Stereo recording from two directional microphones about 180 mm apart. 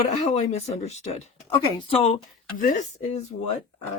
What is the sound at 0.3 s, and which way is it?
Speech, 40° left (ahead or behind).